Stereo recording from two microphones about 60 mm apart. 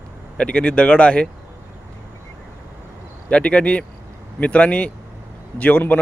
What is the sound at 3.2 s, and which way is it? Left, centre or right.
Speech, centre.